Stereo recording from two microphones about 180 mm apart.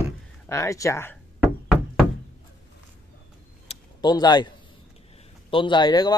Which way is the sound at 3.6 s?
25° left (ahead or behind).